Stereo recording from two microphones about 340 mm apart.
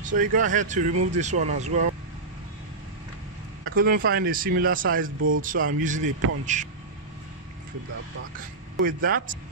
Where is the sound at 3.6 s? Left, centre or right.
Right.